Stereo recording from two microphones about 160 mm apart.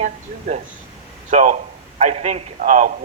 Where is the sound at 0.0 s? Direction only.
50° right (ahead or behind).